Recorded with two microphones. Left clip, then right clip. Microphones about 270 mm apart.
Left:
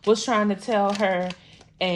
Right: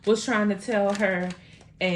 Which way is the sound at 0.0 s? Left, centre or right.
Left.